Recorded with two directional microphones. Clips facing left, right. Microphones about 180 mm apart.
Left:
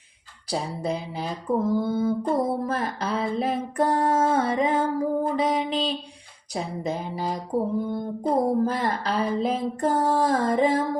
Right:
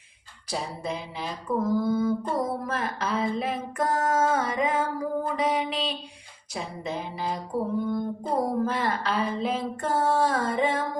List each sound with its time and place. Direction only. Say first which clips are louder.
0.4 s mantra: left 4 dB; 35° left (ahead or behind)